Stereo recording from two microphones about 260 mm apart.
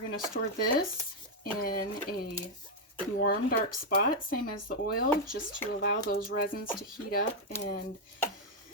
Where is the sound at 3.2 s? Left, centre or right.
Left.